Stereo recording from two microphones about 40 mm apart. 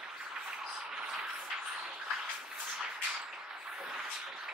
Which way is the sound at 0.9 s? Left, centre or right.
Centre.